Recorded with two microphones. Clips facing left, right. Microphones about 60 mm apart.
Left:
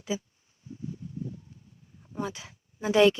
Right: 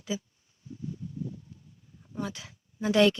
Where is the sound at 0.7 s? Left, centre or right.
Left.